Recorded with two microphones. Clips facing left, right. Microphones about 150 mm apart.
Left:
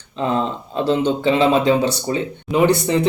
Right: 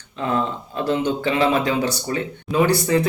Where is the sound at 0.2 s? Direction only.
25° left (ahead or behind).